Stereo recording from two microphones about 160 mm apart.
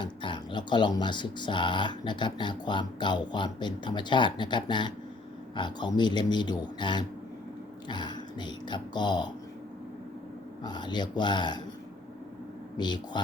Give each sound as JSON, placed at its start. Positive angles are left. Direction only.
{"t": 0.0, "sound": "speech", "side_deg": 30}
{"t": 10.6, "sound": "speech", "side_deg": 25}
{"t": 12.7, "sound": "speech", "side_deg": 25}